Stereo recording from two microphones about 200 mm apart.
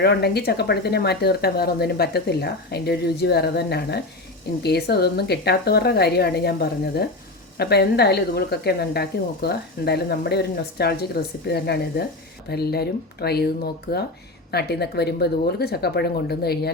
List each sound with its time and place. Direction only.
0.0 s a woman's voice: 55° left (ahead or behind)